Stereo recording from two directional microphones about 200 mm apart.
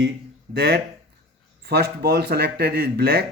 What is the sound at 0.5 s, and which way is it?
Speech, 55° right (ahead or behind).